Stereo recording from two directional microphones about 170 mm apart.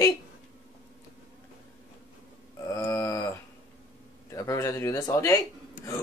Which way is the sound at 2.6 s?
20° left (ahead or behind).